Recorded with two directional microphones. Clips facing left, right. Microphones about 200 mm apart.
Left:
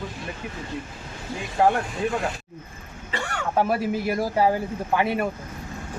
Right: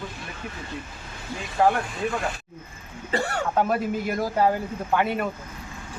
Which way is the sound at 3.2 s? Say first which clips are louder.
Right 2 dB; 35° right (ahead or behind).